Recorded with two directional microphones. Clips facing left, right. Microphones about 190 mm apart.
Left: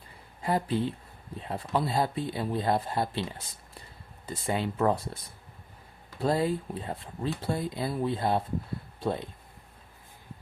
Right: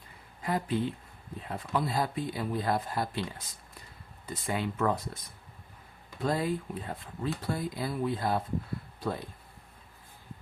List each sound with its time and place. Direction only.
0.4 s speech: 30° left (ahead or behind)